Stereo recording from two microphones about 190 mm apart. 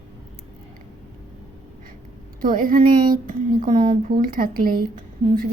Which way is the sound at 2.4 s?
45° right (ahead or behind).